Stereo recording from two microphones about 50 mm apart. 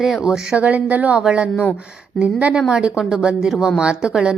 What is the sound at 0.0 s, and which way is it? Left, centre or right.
Speech, centre.